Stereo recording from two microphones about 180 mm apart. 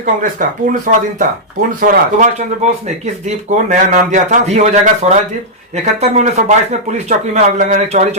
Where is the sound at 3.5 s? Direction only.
45° right (ahead or behind).